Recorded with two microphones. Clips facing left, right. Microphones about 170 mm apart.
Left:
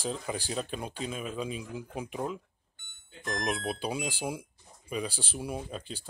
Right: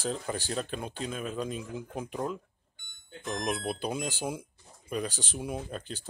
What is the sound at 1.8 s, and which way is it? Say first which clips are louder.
Beep: even; 5° left (ahead or behind).